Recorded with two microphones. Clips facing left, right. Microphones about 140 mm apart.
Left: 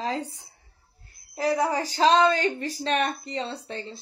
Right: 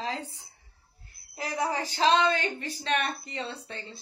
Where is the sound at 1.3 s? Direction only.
35° left (ahead or behind).